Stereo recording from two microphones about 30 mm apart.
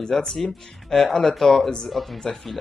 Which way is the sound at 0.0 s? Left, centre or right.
Left.